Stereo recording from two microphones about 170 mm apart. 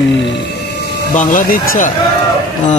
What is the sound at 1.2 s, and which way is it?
Speech, 55° left (ahead or behind).